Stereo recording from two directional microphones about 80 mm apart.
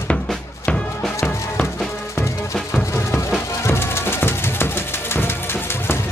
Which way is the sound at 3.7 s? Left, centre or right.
Left.